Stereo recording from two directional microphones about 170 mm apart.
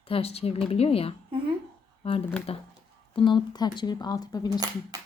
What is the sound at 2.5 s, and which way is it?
Speech, 35° left (ahead or behind).